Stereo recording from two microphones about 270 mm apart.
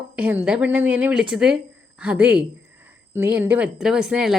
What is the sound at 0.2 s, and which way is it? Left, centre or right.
A woman's voice, centre.